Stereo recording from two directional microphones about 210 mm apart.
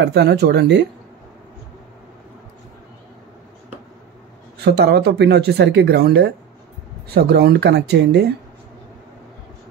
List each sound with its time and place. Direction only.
0.0 s speech: 55° right (ahead or behind)
4.6 s speech: 50° right (ahead or behind)